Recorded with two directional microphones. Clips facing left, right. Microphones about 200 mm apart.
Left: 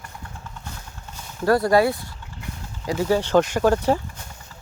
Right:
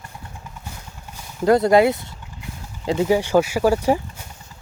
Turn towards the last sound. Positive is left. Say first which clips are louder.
# right 1 dB
turn(degrees=-10)  # may be behind; listen again after turning